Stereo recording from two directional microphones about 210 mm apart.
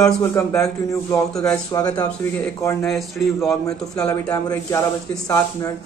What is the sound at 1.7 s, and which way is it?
Speech, 20° left (ahead or behind).